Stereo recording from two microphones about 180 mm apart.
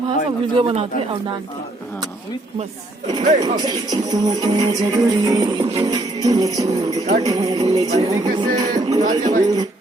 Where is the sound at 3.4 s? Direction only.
20° right (ahead or behind).